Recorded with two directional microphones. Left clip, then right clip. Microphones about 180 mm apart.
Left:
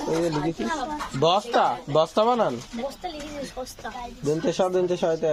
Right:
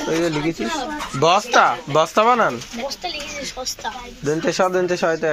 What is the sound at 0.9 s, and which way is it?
Speech, 15° right (ahead or behind).